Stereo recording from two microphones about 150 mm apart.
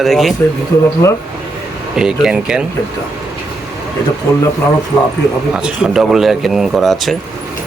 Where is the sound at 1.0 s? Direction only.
20° left (ahead or behind).